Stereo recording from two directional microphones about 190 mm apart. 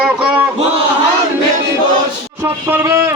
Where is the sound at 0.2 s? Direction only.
5° right (ahead or behind).